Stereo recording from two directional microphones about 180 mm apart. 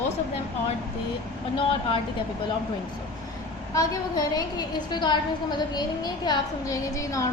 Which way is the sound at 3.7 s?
20° left (ahead or behind).